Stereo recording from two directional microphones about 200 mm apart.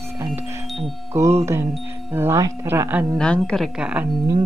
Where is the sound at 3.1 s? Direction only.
5° left (ahead or behind).